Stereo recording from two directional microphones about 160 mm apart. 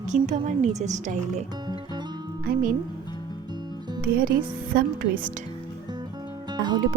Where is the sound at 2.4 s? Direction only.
65° right (ahead or behind).